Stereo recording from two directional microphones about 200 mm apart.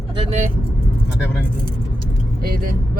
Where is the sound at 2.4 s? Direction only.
50° right (ahead or behind).